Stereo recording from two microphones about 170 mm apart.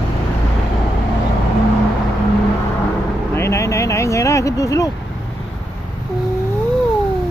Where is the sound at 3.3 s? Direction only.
15° left (ahead or behind).